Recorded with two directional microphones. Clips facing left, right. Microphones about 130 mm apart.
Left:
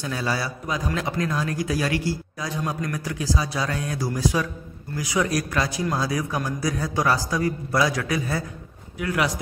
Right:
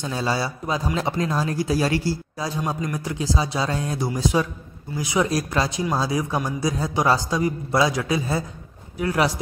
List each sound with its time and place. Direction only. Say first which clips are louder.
0.0 s a man's voice: right 2 dB; 25° right (ahead or behind)